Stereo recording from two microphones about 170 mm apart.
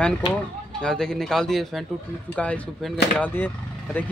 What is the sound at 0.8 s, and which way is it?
Speech, 5° left (ahead or behind).